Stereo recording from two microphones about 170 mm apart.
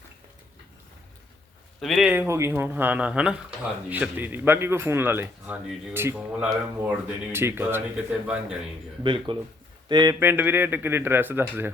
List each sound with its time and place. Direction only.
1.8 s speech: centre (ahead or behind)
9.0 s speech: 30° right (ahead or behind); by 11.7 s 10° right (ahead or behind)